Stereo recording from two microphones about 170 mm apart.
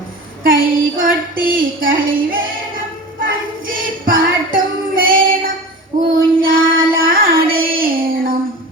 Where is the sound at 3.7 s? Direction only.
55° right (ahead or behind).